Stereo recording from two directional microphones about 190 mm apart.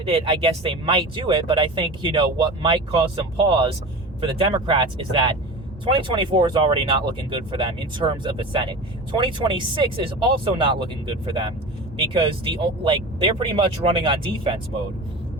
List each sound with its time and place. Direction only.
0.0 s speech: 30° right (ahead or behind)